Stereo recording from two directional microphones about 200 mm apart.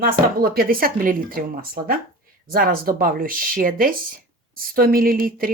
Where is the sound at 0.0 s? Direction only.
50° right (ahead or behind).